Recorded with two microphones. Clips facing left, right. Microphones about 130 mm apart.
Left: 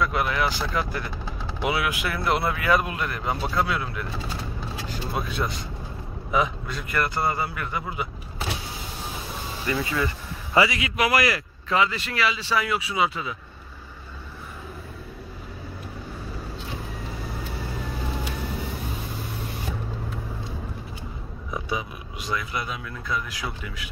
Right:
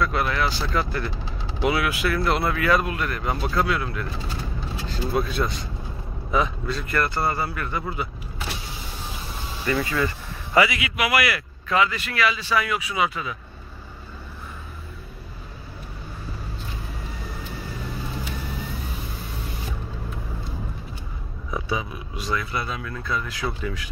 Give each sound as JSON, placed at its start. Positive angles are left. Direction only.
{"t": 0.0, "sound": "speech", "side_deg": 15}
{"t": 9.7, "sound": "speech", "side_deg": 20}
{"t": 22.2, "sound": "speech", "side_deg": 15}